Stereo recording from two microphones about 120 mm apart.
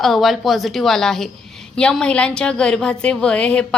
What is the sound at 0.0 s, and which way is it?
A woman's voice, centre (ahead or behind).